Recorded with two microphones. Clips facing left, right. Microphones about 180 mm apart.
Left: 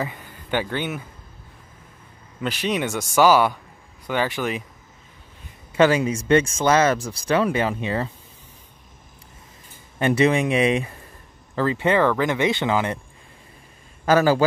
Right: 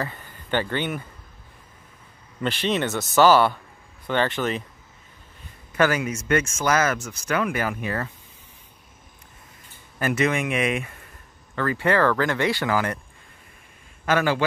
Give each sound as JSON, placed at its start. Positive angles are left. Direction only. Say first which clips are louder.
{"t": 0.0, "sound": "speech", "louder": "left 2 dB", "side_deg": 10}
{"t": 2.4, "sound": "speech", "louder": "even", "side_deg": 5}
{"t": 5.7, "sound": "speech", "louder": "left 4 dB", "side_deg": 25}
{"t": 9.9, "sound": "speech", "louder": "left 4 dB", "side_deg": 30}
{"t": 14.0, "sound": "speech", "louder": "left 5 dB", "side_deg": 35}